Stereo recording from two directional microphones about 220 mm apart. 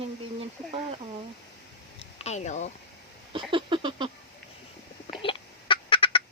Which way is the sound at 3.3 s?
20° right (ahead or behind).